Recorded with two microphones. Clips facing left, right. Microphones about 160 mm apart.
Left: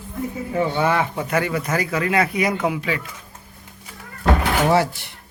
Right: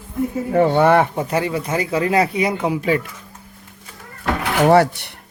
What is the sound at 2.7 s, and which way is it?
Speech, 45° right (ahead or behind).